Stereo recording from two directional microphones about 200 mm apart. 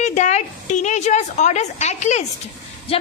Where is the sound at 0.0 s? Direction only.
35° left (ahead or behind).